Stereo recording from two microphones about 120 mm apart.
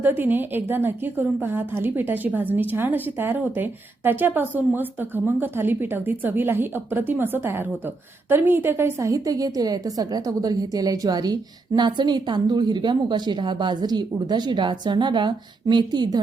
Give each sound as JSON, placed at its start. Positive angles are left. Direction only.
{"t": 0.0, "sound": "a woman's voice", "side_deg": -15}